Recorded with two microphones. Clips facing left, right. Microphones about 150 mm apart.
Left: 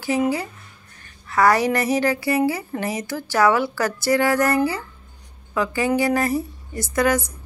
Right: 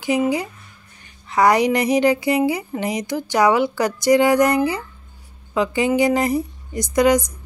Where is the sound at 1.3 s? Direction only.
20° right (ahead or behind).